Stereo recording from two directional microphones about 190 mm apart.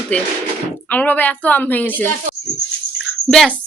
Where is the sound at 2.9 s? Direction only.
Centre (ahead or behind).